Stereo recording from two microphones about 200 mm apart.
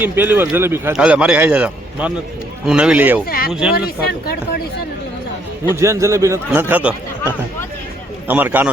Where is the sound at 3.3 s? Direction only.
50° left (ahead or behind).